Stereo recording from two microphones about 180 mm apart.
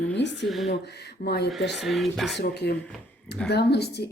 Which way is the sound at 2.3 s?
65° left (ahead or behind).